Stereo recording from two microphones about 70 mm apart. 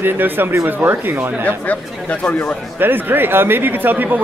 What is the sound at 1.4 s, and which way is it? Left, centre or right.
Speech, left.